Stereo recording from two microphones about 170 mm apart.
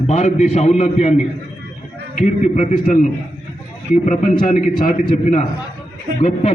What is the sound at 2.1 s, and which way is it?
A man's voice, 45° left (ahead or behind).